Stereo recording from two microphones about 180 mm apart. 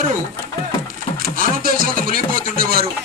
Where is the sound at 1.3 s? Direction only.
50° right (ahead or behind).